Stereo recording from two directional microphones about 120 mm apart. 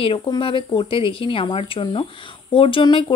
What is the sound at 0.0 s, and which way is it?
A woman's voice, 50° left (ahead or behind).